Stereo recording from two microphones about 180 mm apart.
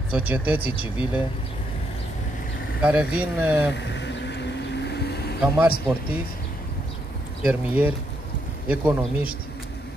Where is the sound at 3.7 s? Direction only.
75° left (ahead or behind).